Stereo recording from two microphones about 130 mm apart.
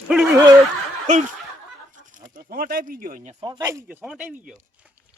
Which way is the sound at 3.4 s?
30° right (ahead or behind).